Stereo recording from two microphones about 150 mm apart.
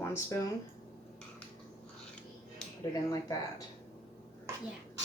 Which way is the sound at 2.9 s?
25° left (ahead or behind).